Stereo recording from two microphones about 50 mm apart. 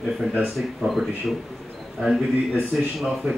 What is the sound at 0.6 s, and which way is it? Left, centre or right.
Speech, centre.